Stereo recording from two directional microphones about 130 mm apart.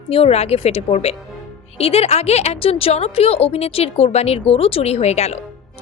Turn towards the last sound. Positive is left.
turn(degrees=55)  # may be behind; listen again after turning